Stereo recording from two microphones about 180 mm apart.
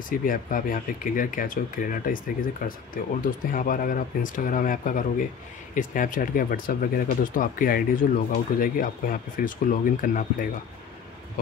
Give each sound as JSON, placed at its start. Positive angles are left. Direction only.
{"t": 0.1, "sound": "speech", "side_deg": 50}